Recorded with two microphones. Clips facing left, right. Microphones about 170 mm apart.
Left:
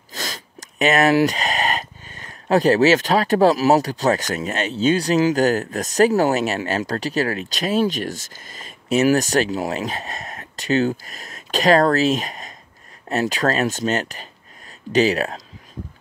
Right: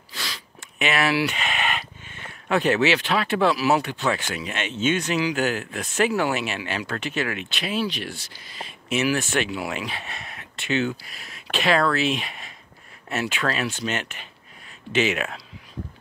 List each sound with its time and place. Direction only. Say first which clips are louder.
0.1 s speech: left 5 dB; 45° left (ahead or behind)